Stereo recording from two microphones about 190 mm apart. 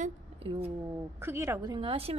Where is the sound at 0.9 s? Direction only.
10° right (ahead or behind).